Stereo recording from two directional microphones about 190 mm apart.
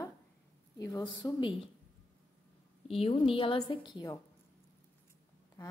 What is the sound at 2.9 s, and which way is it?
A woman's voice, 30° left (ahead or behind).